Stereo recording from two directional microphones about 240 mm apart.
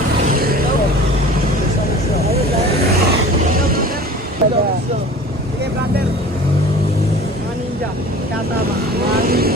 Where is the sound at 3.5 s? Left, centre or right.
Right.